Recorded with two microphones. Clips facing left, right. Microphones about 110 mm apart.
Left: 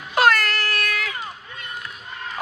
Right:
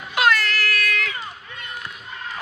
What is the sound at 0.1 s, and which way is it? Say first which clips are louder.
Cat: left 2 dB; 45° left (ahead or behind).